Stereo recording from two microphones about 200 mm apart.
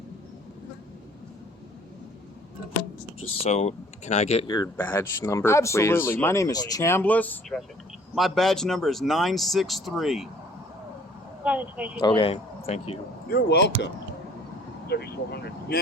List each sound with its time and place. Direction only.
3.4 s speech: 30° left (ahead or behind)
4.5 s speech: 15° left (ahead or behind)
11.4 s speech: 5° right (ahead or behind)
11.9 s speech: 20° left (ahead or behind)
13.3 s speech: 60° left (ahead or behind)